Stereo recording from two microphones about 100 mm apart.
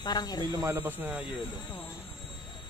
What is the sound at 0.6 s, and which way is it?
Speech, 20° right (ahead or behind).